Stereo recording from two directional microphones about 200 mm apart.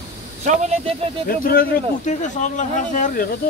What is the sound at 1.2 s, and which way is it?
Speech, 45° left (ahead or behind).